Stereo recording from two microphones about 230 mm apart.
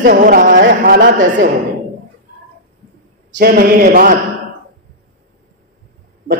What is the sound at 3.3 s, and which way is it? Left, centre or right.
Speech, right.